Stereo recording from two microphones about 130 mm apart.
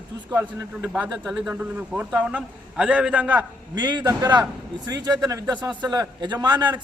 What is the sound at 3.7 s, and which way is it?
A man's voice, 35° right (ahead or behind).